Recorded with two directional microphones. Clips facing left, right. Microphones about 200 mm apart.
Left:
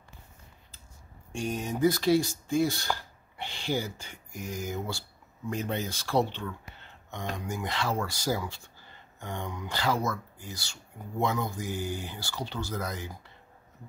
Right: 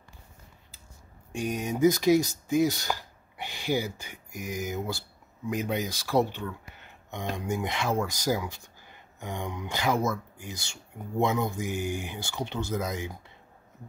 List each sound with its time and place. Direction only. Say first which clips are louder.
1.3 s speech: right 2 dB; 15° right (ahead or behind)